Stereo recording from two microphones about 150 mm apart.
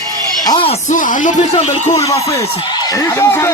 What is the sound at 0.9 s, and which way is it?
Speech, 60° left (ahead or behind).